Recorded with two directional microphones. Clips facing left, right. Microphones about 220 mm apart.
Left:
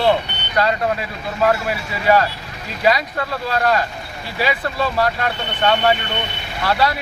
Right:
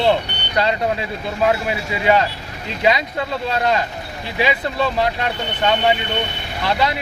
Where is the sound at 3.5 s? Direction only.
20° right (ahead or behind).